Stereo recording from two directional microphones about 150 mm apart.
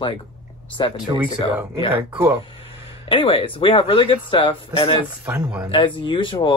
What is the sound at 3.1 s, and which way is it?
Speech, 35° left (ahead or behind).